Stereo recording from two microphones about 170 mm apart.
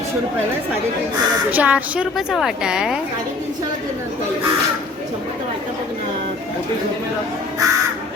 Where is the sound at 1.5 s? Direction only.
10° right (ahead or behind).